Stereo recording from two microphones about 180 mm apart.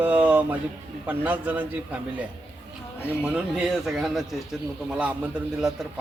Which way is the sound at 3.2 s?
5° right (ahead or behind).